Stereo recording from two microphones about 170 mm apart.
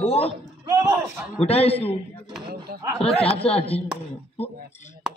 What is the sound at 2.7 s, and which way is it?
Speech, 60° right (ahead or behind).